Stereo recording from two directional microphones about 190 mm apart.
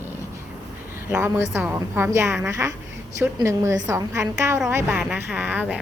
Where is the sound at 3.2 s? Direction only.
15° right (ahead or behind).